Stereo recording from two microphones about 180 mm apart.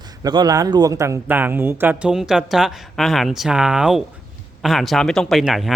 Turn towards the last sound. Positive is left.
turn(degrees=0)  # may be behind; listen again after turning